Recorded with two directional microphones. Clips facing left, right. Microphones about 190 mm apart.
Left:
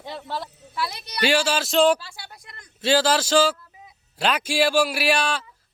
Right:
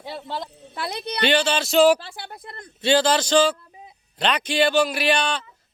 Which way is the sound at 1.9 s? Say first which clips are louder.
Right 5 dB; 55° right (ahead or behind).